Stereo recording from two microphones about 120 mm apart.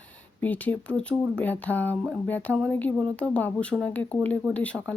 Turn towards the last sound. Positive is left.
turn(degrees=10)  # may be behind; listen again after turning